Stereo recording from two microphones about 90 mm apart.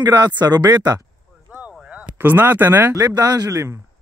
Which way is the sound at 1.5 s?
20° right (ahead or behind).